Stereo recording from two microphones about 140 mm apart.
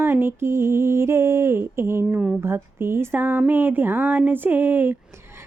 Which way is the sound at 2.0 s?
5° right (ahead or behind).